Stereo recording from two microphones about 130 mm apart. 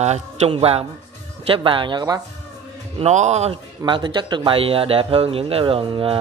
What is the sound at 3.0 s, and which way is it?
Speech, 60° right (ahead or behind).